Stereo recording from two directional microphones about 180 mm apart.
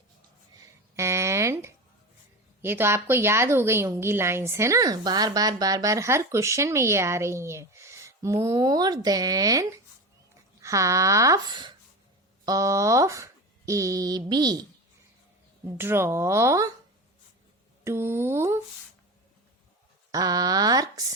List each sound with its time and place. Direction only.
0.9 s a sound: 15° right (ahead or behind)
2.6 s a woman's voice: 10° right (ahead or behind)
15.8 s a woman's voice: 15° right (ahead or behind)
17.8 s a woman's voice: 15° right (ahead or behind)
20.1 s speech: 20° right (ahead or behind)